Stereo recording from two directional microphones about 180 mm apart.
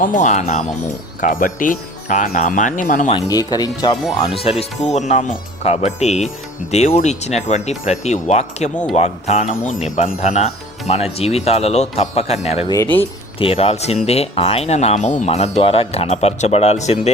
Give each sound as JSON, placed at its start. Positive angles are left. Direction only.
{"t": 0.0, "sound": "speech", "side_deg": 45}
{"t": 3.1, "sound": "speech", "side_deg": 20}
{"t": 8.7, "sound": "speech", "side_deg": 5}
{"t": 9.0, "sound": "speech", "side_deg": 40}
{"t": 12.7, "sound": "speech", "side_deg": 15}
{"t": 13.4, "sound": "speech", "side_deg": 30}